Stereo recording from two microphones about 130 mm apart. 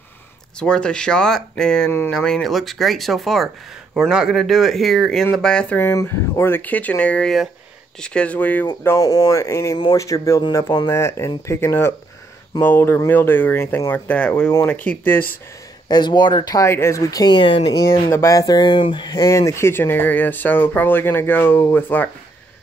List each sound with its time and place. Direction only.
0.6 s speech: 5° left (ahead or behind)
5.8 s speech: 15° left (ahead or behind)
8.8 s speech: 25° left (ahead or behind)
10.9 s speech: 20° left (ahead or behind)
15.9 s speech: 35° left (ahead or behind)
16.6 s speech: 20° left (ahead or behind); by 18.1 s 40° left (ahead or behind)
18.1 s speech: 25° left (ahead or behind)